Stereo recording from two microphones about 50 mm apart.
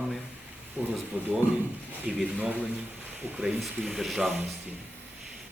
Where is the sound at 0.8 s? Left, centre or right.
Right.